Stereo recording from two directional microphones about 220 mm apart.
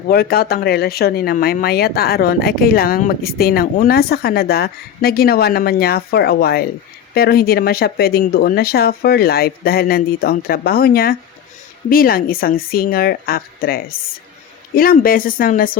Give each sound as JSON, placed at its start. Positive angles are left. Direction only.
{"t": 0.1, "sound": "speech", "side_deg": 45}